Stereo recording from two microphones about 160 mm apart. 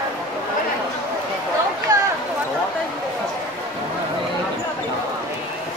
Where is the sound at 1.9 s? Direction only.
25° right (ahead or behind).